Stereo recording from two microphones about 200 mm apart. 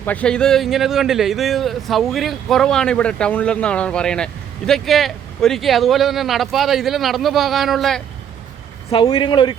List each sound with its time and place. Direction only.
0.0 s speech: 5° left (ahead or behind)
8.9 s a man's voice: 25° left (ahead or behind)